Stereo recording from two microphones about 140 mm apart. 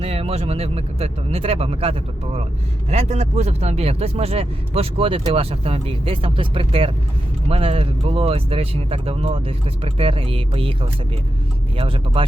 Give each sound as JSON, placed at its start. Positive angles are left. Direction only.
{"t": 0.0, "sound": "speech", "side_deg": -45}